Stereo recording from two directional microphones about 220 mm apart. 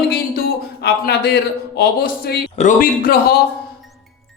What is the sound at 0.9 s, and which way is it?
A man's voice, 50° left (ahead or behind).